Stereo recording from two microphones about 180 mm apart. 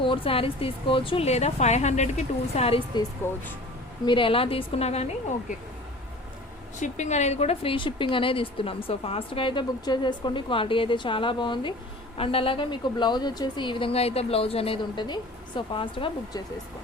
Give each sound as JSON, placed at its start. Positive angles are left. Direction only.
{"t": 0.0, "sound": "speech", "side_deg": 30}
{"t": 6.7, "sound": "a woman's voice", "side_deg": 40}